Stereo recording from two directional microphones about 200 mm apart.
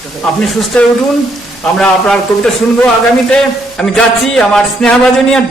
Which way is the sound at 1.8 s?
5° left (ahead or behind).